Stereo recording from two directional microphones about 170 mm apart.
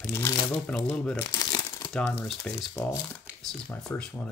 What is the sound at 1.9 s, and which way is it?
Speech, 5° left (ahead or behind).